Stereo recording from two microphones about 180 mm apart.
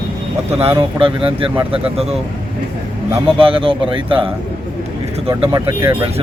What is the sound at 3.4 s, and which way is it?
Speech, 30° right (ahead or behind).